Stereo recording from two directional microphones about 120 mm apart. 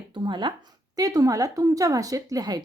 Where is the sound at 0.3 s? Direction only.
40° right (ahead or behind).